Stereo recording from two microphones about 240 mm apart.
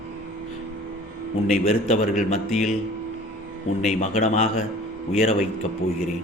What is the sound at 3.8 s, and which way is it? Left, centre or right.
Speech, left.